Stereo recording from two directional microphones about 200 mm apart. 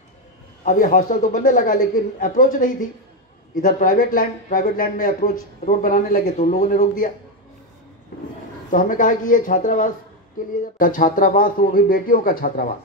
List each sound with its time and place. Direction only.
0.7 s a man's voice: 40° left (ahead or behind)
8.7 s a man's voice: 40° left (ahead or behind)